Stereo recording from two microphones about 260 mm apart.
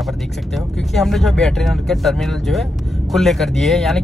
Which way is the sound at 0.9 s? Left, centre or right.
Centre.